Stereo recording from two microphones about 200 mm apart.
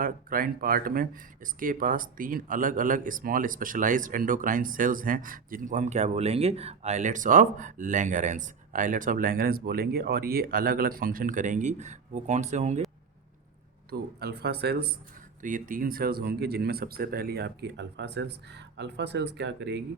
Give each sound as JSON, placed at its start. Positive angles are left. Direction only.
{"t": 0.0, "sound": "speech", "side_deg": -45}
{"t": 13.9, "sound": "speech", "side_deg": -55}
{"t": 15.4, "sound": "speech", "side_deg": -40}